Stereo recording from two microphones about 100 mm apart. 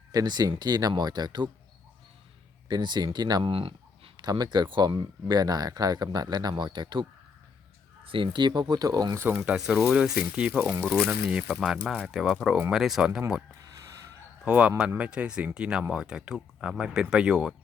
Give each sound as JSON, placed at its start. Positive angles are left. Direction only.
{"t": 0.1, "sound": "speech", "side_deg": -40}
{"t": 2.6, "sound": "speech", "side_deg": -45}
{"t": 3.5, "sound": "a sound", "side_deg": -70}
{"t": 4.2, "sound": "speech", "side_deg": -45}
{"t": 8.0, "sound": "speech", "side_deg": -60}
{"t": 9.2, "sound": "speech", "side_deg": -15}
{"t": 10.8, "sound": "speech", "side_deg": 5}
{"t": 14.4, "sound": "speech", "side_deg": -15}